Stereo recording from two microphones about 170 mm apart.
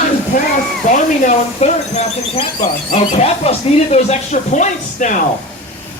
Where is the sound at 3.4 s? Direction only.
40° left (ahead or behind).